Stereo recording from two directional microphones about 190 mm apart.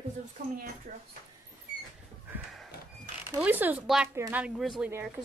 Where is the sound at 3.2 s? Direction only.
10° right (ahead or behind).